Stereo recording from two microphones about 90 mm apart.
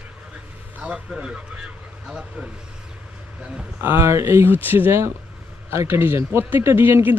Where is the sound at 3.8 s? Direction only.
30° right (ahead or behind).